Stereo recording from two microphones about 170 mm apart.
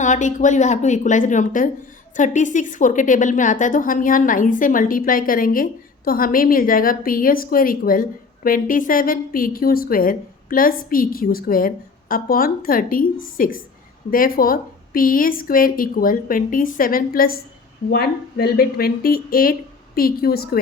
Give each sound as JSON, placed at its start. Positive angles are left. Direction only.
{"t": 0.0, "sound": "a woman's voice", "side_deg": 45}